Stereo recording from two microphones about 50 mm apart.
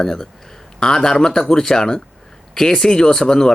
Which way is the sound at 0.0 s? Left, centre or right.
Centre.